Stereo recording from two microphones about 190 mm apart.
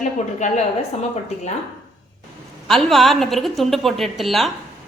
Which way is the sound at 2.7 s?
Centre (ahead or behind).